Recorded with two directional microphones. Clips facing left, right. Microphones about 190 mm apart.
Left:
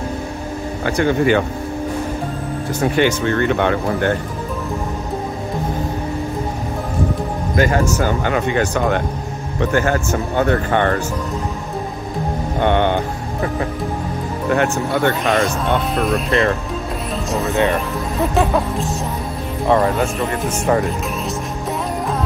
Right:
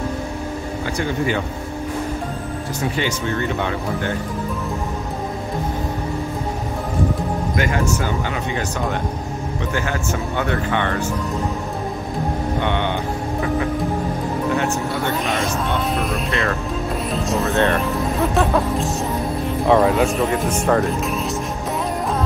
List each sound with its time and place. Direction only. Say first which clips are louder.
0.8 s speech: left 7 dB; 65° left (ahead or behind)
2.8 s speech: left 7 dB; 60° left (ahead or behind)
7.5 s speech: left 6 dB; 40° left (ahead or behind)
8.2 s speech: left 6 dB; 60° left (ahead or behind)
9.6 s speech: left 8 dB; 50° left (ahead or behind)
12.5 s speech: left 8 dB; 50° left (ahead or behind)
14.5 s speech: left 8 dB; 60° left (ahead or behind)
15.2 s speech: left 5 dB; centre (ahead or behind)
17.3 s speech: left 1 dB; centre (ahead or behind)